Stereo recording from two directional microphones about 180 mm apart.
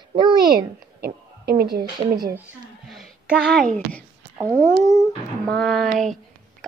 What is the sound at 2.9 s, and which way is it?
Speech, centre (ahead or behind).